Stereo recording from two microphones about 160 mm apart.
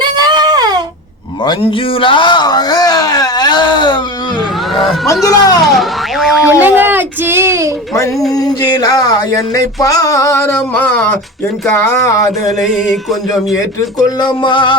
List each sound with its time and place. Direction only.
0.0 s a sound: 25° right (ahead or behind)
2.0 s speech: 30° left (ahead or behind)
5.2 s music: 20° left (ahead or behind)
5.6 s child singing: centre (ahead or behind); by 7.7 s 15° right (ahead or behind)
8.3 s music: 25° left (ahead or behind)
12.5 s a sound: centre (ahead or behind)
14.2 s music: 30° left (ahead or behind)